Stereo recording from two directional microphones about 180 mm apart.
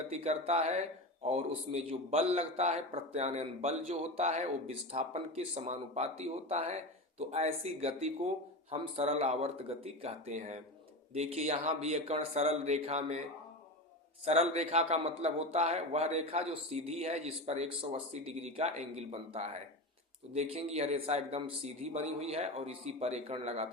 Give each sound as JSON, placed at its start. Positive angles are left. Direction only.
{"t": 0.1, "sound": "speech", "side_deg": -35}
{"t": 14.3, "sound": "speech", "side_deg": -35}